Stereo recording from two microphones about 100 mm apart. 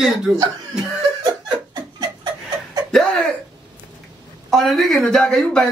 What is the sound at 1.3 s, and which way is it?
Laughter, 45° right (ahead or behind).